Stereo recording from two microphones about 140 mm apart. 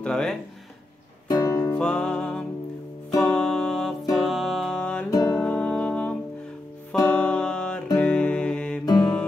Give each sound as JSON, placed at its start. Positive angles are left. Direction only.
{"t": 0.0, "sound": "speech", "side_deg": 5}
{"t": 1.3, "sound": "music", "side_deg": 25}
{"t": 1.8, "sound": "music", "side_deg": 5}
{"t": 5.1, "sound": "music", "side_deg": 25}
{"t": 5.4, "sound": "music", "side_deg": 10}